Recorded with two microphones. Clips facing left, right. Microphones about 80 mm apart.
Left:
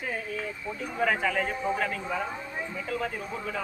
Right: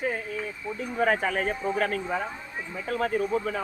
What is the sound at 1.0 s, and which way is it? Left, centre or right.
A man's voice, right.